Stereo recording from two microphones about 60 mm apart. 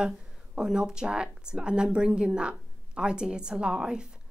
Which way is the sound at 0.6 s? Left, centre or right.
Centre.